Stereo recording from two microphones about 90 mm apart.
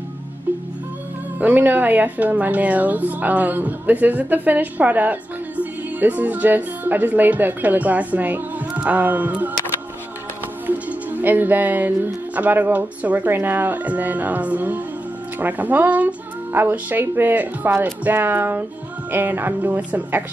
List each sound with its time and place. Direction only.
0.5 s music: 20° right (ahead or behind)
1.4 s a woman's voice: 20° right (ahead or behind)
10.9 s a woman's voice: 20° right (ahead or behind)